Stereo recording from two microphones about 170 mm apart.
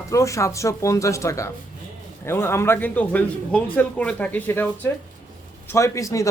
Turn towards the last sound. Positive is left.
turn(degrees=20)  # may be behind; listen again after turning